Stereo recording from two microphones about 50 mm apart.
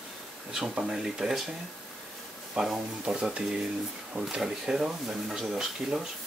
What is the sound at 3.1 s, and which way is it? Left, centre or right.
Speech, centre.